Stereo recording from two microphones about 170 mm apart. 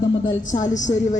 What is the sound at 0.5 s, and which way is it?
Speech, 45° left (ahead or behind).